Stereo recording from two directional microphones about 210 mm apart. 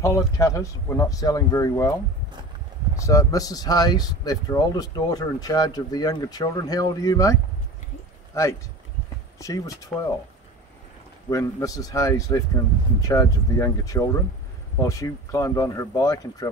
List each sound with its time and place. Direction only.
0.0 s speech: 15° left (ahead or behind)
3.0 s speech: 15° left (ahead or behind)
8.3 s speech: 15° left (ahead or behind)
11.2 s speech: 15° left (ahead or behind)